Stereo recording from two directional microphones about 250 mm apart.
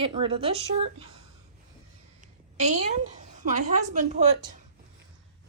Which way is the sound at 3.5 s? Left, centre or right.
Right.